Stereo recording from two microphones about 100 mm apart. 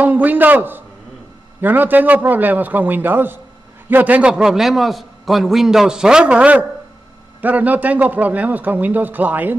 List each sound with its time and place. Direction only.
0.0 s a man's voice: 15° right (ahead or behind)